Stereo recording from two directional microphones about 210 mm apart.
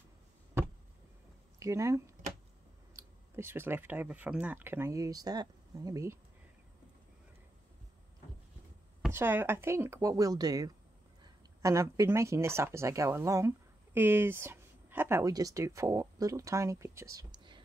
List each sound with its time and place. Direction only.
1.6 s speech: 15° right (ahead or behind)
9.1 s speech: 10° right (ahead or behind)